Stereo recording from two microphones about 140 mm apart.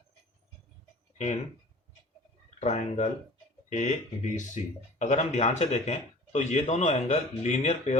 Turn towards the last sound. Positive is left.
turn(degrees=55)  # may be behind; listen again after turning